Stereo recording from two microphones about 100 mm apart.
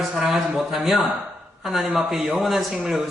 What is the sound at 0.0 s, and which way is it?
A man's voice, centre (ahead or behind).